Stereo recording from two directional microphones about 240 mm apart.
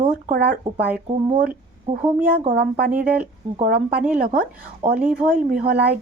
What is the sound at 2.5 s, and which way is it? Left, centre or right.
Speech, right.